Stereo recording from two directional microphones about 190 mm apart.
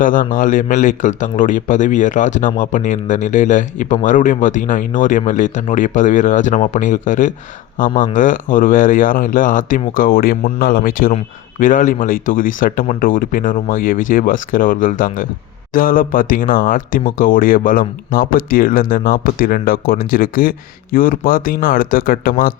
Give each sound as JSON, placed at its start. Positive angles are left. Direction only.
{"t": 0.0, "sound": "speech", "side_deg": 45}